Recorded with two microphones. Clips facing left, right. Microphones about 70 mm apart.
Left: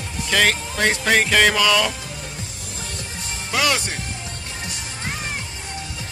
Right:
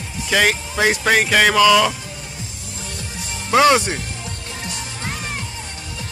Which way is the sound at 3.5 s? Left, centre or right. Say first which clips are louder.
Right 8 dB; right.